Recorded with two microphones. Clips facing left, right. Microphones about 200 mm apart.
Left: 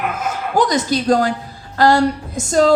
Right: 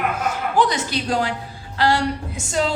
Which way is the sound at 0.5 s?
40° left (ahead or behind).